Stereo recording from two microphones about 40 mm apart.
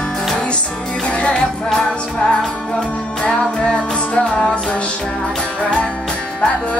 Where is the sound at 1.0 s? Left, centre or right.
Left.